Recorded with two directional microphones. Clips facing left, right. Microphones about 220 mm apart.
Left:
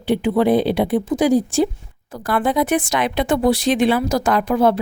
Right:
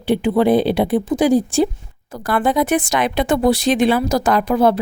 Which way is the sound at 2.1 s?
45° right (ahead or behind).